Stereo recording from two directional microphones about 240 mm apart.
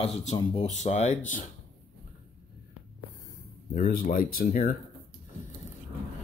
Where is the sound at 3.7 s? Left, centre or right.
Left.